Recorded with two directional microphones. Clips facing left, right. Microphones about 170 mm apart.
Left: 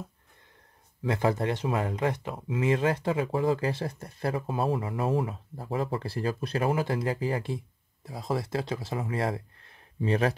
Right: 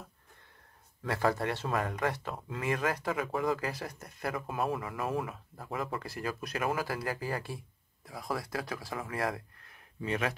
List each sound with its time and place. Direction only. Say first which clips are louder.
1.0 s speech: left 4 dB; 20° left (ahead or behind)